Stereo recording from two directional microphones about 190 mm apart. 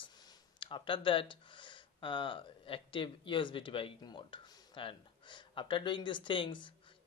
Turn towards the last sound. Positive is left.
turn(degrees=25)  # may be behind; listen again after turning